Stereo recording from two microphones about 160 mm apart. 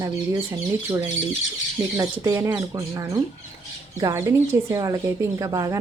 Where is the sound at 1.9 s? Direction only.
20° right (ahead or behind).